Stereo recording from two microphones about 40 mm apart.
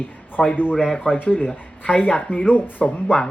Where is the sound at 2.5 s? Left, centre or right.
Left.